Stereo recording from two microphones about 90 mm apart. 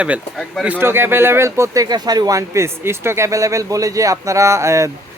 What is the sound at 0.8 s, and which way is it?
Speech, 25° right (ahead or behind).